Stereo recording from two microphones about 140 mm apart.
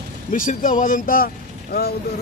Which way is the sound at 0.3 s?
70° left (ahead or behind).